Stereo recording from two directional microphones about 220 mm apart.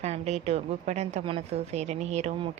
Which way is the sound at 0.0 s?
30° right (ahead or behind).